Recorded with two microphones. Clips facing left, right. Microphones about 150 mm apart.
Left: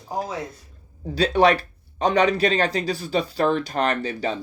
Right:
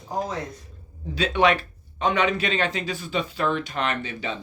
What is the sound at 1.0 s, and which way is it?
Speech, 35° left (ahead or behind).